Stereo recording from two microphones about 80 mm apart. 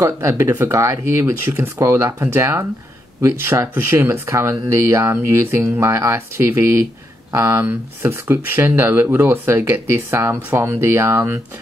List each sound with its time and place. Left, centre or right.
0.0 s speech: right